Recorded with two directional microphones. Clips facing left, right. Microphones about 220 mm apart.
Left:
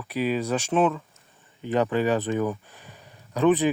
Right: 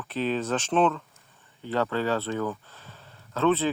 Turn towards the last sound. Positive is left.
turn(degrees=15)  # may be behind; listen again after turning